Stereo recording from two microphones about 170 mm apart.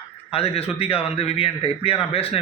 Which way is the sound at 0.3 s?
35° left (ahead or behind).